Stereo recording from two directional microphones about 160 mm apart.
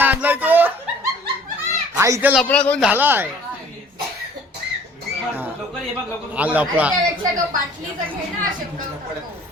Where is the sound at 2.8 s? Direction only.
10° right (ahead or behind).